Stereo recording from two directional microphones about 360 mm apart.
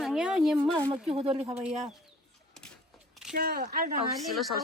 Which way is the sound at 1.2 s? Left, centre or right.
Centre.